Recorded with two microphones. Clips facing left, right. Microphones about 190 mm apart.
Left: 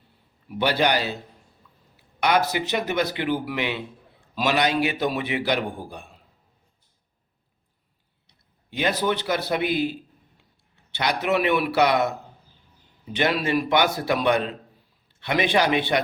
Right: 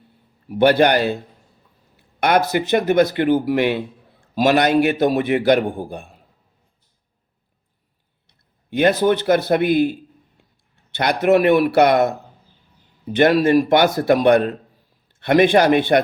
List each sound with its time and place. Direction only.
0.4 s speech: 45° right (ahead or behind)
8.3 s a man's voice: 50° right (ahead or behind)
10.9 s speech: 50° right (ahead or behind)
13.1 s speech: 50° right (ahead or behind)